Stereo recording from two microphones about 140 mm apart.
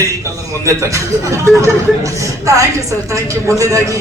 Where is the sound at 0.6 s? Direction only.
20° right (ahead or behind).